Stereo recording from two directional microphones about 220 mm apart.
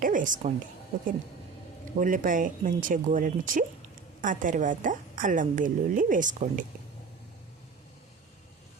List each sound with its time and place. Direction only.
0.0 s a woman's voice: 35° right (ahead or behind)
2.0 s a woman's voice: 40° right (ahead or behind)